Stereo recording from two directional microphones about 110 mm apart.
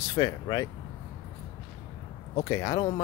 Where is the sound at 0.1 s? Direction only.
40° left (ahead or behind).